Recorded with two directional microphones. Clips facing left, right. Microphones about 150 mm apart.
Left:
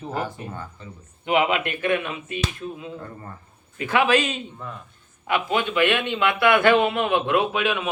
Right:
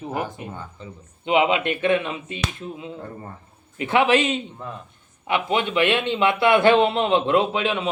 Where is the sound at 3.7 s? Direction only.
25° right (ahead or behind).